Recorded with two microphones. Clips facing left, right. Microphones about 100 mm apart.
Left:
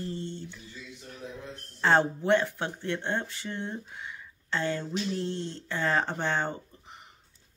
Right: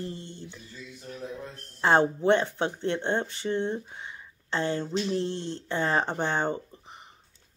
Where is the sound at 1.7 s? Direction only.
20° right (ahead or behind).